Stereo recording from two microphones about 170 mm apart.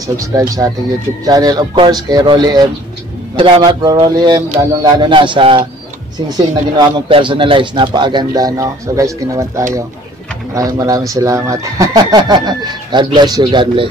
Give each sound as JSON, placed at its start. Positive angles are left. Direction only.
{"t": 0.0, "sound": "a man's voice", "side_deg": -20}